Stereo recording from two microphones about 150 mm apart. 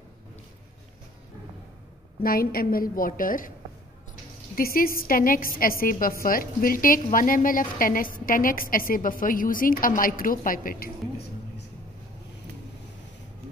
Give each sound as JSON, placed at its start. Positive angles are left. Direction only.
{"t": 2.2, "sound": "a woman's voice", "side_deg": 75}
{"t": 4.6, "sound": "a woman's voice", "side_deg": 75}